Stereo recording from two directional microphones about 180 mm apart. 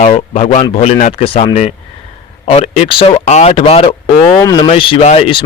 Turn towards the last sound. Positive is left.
turn(degrees=30)  # may be behind; listen again after turning